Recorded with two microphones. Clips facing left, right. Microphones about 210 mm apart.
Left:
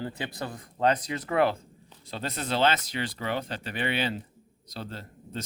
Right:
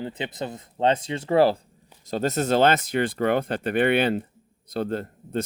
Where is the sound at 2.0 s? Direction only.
45° right (ahead or behind).